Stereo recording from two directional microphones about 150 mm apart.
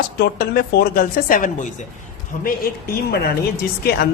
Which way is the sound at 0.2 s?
90° left.